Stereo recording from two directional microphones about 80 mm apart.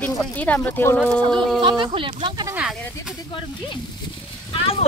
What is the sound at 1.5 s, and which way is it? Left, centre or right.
Speech, right.